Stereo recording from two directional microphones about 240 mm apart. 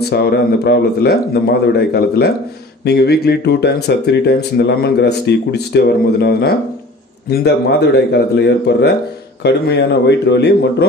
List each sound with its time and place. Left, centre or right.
0.1 s speech: left